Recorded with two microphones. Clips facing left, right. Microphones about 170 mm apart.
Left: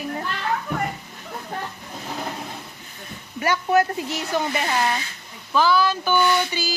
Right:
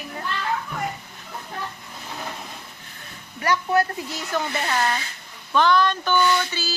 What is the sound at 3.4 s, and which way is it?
Speech, 20° left (ahead or behind).